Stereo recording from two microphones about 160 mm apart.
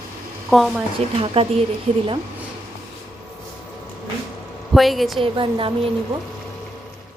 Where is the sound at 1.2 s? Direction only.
35° right (ahead or behind).